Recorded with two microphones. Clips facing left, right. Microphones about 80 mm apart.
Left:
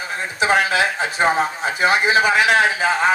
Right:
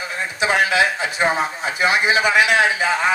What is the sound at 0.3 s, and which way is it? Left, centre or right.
Speech, left.